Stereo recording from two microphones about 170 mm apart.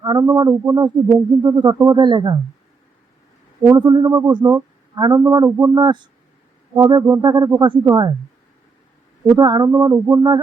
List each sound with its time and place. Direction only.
0.0 s speech: 20° right (ahead or behind)
3.6 s speech: 25° right (ahead or behind)
9.4 s speech: 25° right (ahead or behind)